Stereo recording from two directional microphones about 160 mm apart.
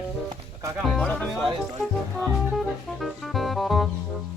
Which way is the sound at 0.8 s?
Centre (ahead or behind).